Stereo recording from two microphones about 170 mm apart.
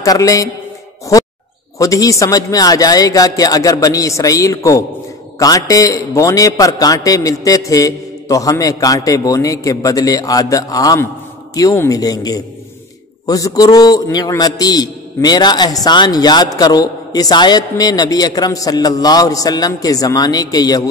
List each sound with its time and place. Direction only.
0.0 s a man's voice: 20° left (ahead or behind)
1.8 s a man's voice: 20° left (ahead or behind)